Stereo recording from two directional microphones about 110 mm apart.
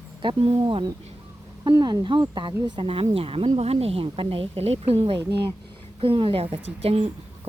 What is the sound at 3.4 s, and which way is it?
A woman's voice, 65° right (ahead or behind).